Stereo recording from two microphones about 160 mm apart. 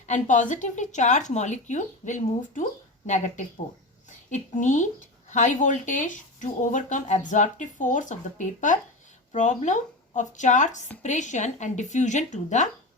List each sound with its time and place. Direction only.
0.1 s speech: 50° left (ahead or behind)